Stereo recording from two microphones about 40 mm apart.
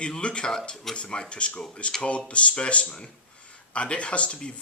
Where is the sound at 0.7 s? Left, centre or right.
Centre.